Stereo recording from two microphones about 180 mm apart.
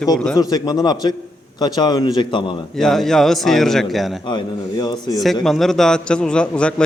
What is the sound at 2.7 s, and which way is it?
A man's voice, centre (ahead or behind).